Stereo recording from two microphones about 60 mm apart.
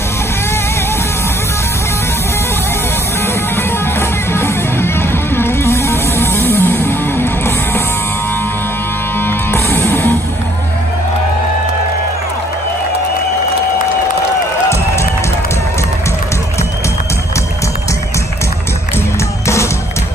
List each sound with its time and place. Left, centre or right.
4.3 s music: left
9.5 s music: left
19.4 s music: left